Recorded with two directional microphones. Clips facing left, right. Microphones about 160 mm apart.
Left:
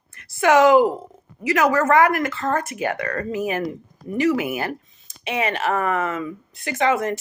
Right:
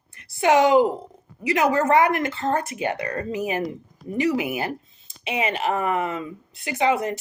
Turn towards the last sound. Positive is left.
turn(degrees=-20)  # may be behind; listen again after turning